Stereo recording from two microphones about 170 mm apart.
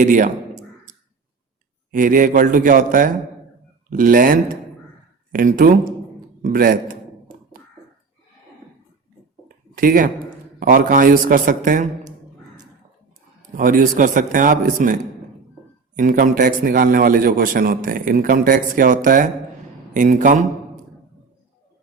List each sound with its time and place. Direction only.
0.0 s a sound: 50° right (ahead or behind)
1.9 s a man's voice: 55° right (ahead or behind)
9.7 s speech: 55° right (ahead or behind)
13.6 s a man's voice: 50° right (ahead or behind)
16.0 s a man's voice: 50° right (ahead or behind)